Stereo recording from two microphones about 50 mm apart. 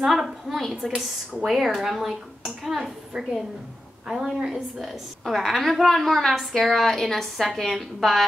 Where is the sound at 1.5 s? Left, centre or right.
Centre.